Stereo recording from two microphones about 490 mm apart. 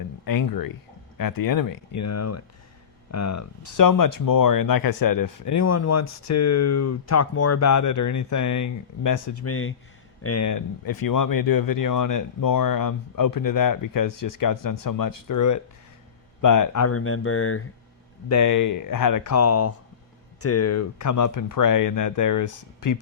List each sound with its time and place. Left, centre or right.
0.3 s speech: left
18.3 s speech: left